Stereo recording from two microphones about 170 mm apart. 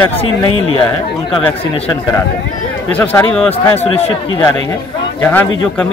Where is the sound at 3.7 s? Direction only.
35° left (ahead or behind).